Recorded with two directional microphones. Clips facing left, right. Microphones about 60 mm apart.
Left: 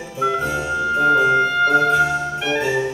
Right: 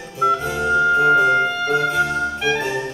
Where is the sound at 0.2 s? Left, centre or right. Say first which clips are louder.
Right 2 dB; centre.